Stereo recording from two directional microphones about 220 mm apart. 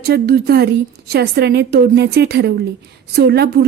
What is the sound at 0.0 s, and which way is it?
A woman's voice, 45° right (ahead or behind).